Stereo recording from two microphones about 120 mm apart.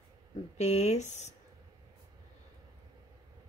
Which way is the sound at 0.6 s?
70° left (ahead or behind).